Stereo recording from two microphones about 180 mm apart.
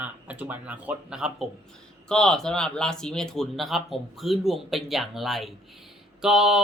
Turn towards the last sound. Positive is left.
turn(degrees=-5)  # may be behind; listen again after turning